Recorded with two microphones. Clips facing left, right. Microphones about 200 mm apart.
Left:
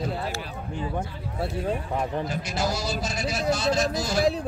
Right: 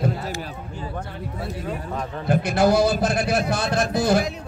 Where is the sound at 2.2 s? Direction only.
55° right (ahead or behind).